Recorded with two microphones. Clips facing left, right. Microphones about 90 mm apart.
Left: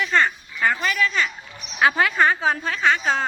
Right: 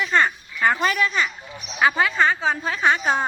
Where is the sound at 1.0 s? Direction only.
10° right (ahead or behind).